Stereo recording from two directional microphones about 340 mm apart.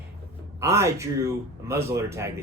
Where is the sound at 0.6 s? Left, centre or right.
Centre.